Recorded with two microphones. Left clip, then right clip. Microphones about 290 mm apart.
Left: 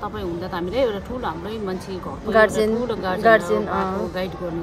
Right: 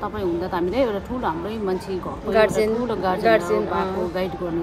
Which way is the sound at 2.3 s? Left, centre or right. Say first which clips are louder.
Left 1 dB; centre.